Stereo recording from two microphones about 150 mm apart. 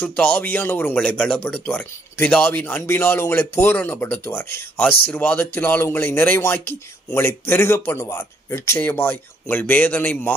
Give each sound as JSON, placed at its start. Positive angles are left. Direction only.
{"t": 0.0, "sound": "speech", "side_deg": 10}